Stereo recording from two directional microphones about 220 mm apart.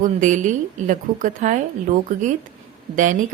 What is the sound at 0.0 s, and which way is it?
A woman's voice, 35° right (ahead or behind).